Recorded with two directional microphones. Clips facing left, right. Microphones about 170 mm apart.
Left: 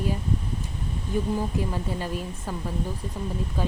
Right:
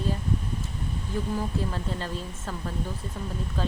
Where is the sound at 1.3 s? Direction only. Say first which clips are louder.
Left 2 dB; 15° left (ahead or behind).